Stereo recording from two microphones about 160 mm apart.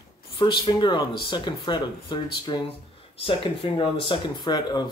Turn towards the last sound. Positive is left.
turn(degrees=25)  # may be behind; listen again after turning